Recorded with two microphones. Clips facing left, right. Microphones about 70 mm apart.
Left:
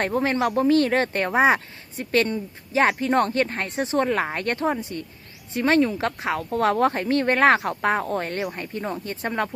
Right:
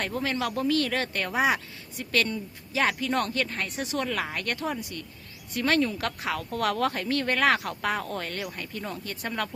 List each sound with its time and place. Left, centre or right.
0.0 s speech: left